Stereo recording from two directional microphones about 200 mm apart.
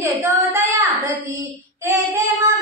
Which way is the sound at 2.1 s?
15° right (ahead or behind).